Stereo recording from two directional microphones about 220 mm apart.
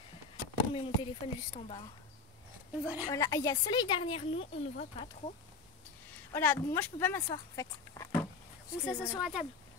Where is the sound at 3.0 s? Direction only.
15° left (ahead or behind).